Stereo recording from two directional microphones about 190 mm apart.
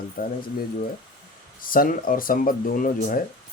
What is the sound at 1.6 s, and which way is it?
Speech, 50° left (ahead or behind).